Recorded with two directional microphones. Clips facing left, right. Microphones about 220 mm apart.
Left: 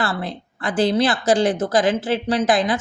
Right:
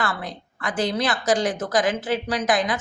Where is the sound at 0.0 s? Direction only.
30° left (ahead or behind).